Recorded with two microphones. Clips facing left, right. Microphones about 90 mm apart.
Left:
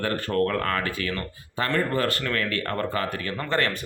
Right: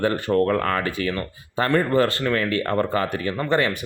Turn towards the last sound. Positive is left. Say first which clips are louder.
# right 4 dB
turn(degrees=-15)  # may be behind; listen again after turning